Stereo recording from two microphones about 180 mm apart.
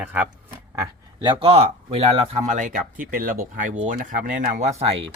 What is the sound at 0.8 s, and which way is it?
Speech, 25° right (ahead or behind).